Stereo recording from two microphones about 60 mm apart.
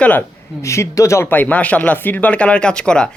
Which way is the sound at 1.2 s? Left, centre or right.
Left.